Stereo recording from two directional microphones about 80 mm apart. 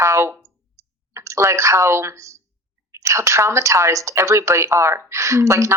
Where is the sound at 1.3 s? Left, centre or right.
Right.